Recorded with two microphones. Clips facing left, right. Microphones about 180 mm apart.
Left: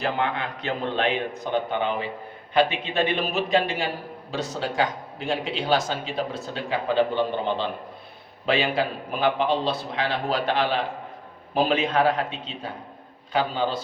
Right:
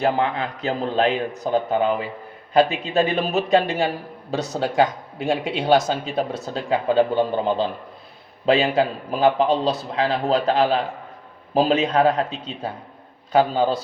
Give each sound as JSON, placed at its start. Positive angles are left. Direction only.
{"t": 0.0, "sound": "a man's voice", "side_deg": -35}